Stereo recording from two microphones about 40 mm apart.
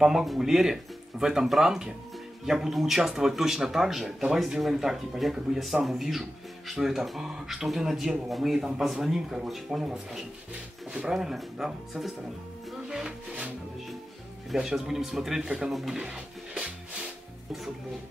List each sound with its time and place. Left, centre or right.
0.0 s a man's voice: centre
9.1 s a man's voice: centre
11.1 s a man's voice: centre
12.8 s music: centre
14.5 s a man's voice: centre
16.0 s music: right